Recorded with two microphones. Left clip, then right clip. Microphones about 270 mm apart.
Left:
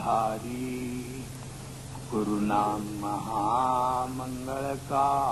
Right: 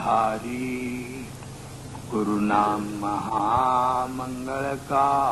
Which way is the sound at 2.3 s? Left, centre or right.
Right.